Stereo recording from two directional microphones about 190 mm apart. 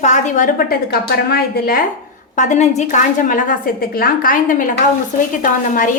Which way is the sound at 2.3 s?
40° left (ahead or behind).